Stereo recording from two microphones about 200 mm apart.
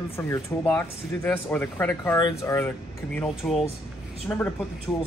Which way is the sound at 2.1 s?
20° left (ahead or behind).